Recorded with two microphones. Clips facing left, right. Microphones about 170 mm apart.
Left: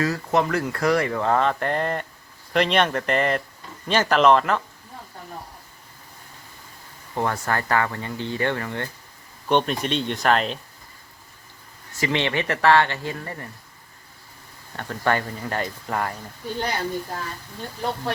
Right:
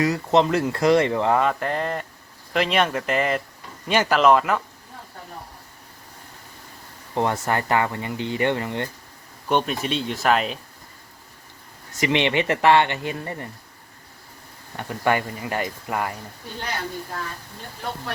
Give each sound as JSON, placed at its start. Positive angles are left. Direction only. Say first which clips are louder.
{"t": 0.0, "sound": "speech", "louder": "right 3 dB", "side_deg": -20}
{"t": 7.1, "sound": "speech", "louder": "right 2 dB", "side_deg": -20}
{"t": 9.5, "sound": "speech", "louder": "left 1 dB", "side_deg": -5}
{"t": 11.9, "sound": "speech", "louder": "right 3 dB", "side_deg": -20}
{"t": 14.8, "sound": "speech", "louder": "right 1 dB", "side_deg": -15}